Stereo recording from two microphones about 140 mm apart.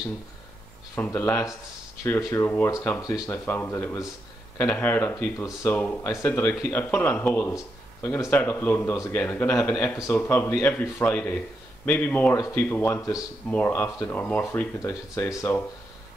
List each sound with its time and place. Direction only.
0.9 s a man's voice: 15° left (ahead or behind)
12.4 s a man's voice: 20° left (ahead or behind)
14.8 s a man's voice: 20° left (ahead or behind)